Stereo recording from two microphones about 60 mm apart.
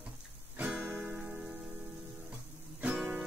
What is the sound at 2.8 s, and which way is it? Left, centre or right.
Guitar, right.